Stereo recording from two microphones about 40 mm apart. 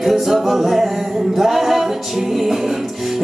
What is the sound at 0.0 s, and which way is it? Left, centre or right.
Singing, centre.